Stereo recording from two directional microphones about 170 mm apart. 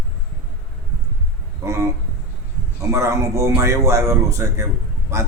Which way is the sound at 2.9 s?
15° right (ahead or behind).